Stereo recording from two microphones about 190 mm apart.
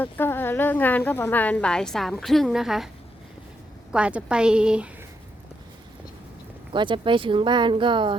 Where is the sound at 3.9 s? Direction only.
5° right (ahead or behind).